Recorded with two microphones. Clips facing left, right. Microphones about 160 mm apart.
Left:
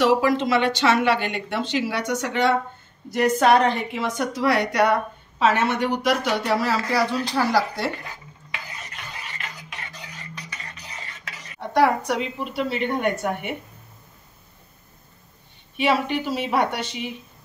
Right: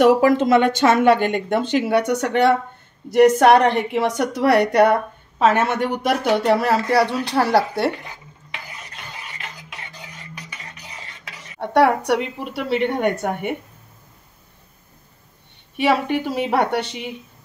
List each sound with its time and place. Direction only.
0.0 s a woman's voice: 50° right (ahead or behind)
11.6 s speech: 65° right (ahead or behind)
15.8 s speech: 55° right (ahead or behind)